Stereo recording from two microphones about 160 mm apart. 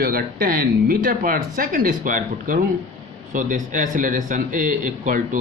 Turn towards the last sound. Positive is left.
turn(degrees=-55)  # may be behind; listen again after turning